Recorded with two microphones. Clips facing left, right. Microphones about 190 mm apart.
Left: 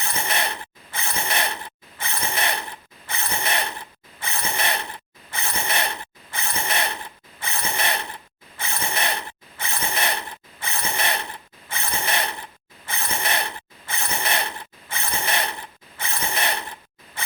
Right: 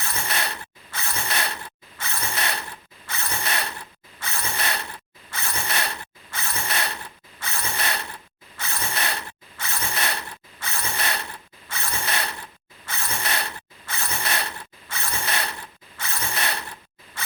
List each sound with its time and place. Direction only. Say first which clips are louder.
0.0 s mechanisms: left 3 dB; 20° left (ahead or behind)